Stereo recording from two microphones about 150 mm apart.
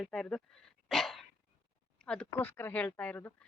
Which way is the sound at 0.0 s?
5° left (ahead or behind).